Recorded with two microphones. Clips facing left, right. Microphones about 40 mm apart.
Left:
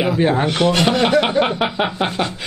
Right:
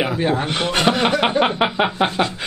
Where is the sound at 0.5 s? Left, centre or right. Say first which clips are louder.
Left 2 dB; centre.